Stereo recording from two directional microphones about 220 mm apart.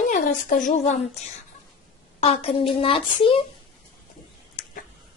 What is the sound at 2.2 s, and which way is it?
A child's voice, 25° left (ahead or behind).